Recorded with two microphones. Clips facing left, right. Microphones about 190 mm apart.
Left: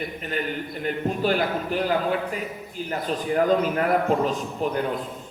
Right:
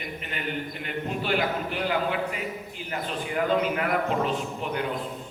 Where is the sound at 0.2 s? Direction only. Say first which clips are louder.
Left 2 dB; 40° left (ahead or behind).